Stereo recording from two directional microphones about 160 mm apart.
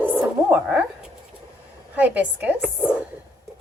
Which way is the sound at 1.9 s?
10° right (ahead or behind).